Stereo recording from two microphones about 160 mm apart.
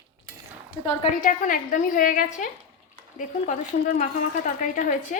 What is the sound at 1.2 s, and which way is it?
Speech, 55° left (ahead or behind).